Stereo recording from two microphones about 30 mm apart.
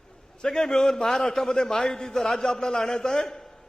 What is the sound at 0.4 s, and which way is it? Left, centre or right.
A man's voice, left.